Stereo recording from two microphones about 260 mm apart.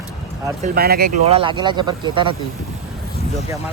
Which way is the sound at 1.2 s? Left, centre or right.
Right.